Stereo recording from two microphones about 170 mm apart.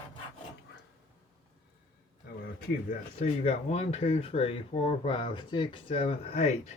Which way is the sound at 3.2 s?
40° left (ahead or behind).